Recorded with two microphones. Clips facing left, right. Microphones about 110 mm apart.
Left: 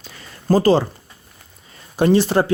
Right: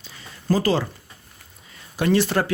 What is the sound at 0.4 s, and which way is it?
Speech, 35° left (ahead or behind).